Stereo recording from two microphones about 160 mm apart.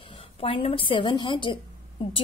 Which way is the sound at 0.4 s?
35° left (ahead or behind).